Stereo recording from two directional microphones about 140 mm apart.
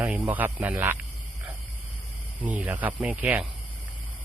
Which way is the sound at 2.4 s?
10° right (ahead or behind).